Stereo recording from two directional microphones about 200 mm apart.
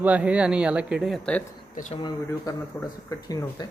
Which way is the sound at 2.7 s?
15° left (ahead or behind).